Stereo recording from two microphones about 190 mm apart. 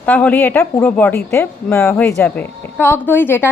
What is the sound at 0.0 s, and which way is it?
Speech, 10° left (ahead or behind).